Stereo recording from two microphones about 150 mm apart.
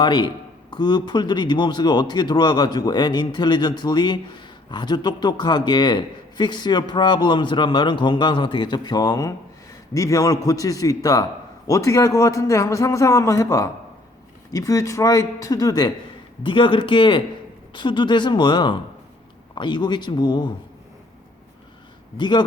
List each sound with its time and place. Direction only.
0.0 s speech: 30° left (ahead or behind)
22.2 s speech: 30° left (ahead or behind)